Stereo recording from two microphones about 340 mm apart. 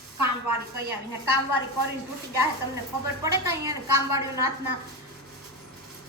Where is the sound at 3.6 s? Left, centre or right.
Centre.